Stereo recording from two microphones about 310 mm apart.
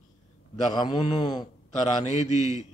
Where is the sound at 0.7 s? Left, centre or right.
Centre.